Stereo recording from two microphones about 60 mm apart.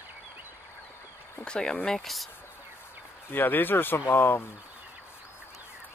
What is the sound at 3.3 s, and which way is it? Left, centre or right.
Speech, left.